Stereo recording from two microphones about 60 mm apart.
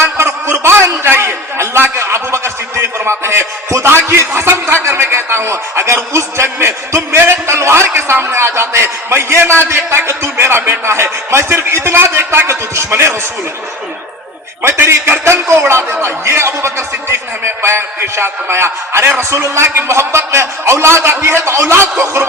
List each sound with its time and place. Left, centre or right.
0.0 s a sound: right
12.5 s a man's voice: right
14.6 s a man's voice: right